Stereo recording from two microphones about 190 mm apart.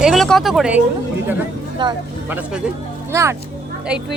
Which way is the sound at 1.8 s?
25° right (ahead or behind).